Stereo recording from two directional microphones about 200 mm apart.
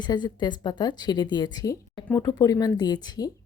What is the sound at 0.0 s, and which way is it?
A woman's voice, 20° left (ahead or behind).